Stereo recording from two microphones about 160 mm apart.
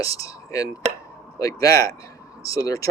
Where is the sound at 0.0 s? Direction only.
20° left (ahead or behind).